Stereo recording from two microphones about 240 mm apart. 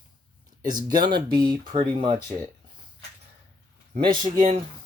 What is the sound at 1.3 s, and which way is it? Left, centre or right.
Speech, centre.